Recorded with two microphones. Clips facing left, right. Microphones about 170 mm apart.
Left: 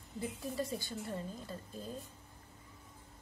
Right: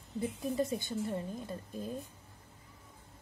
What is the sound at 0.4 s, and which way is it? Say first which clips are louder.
Speech: right 6 dB; 20° right (ahead or behind).